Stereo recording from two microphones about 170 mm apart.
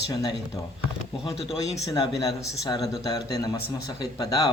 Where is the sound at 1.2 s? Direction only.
35° left (ahead or behind).